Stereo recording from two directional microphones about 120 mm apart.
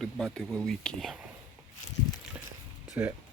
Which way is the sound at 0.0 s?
Centre (ahead or behind).